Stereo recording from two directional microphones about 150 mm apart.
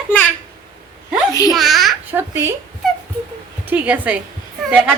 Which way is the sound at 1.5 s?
Centre (ahead or behind).